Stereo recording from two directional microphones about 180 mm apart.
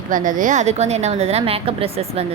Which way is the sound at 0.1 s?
45° right (ahead or behind).